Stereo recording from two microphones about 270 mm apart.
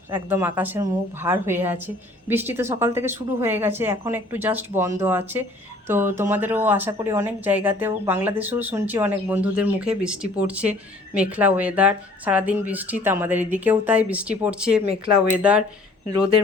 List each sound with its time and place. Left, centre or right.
0.1 s speech: centre